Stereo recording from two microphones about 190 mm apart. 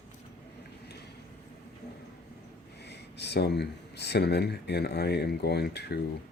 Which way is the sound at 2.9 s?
60° left (ahead or behind).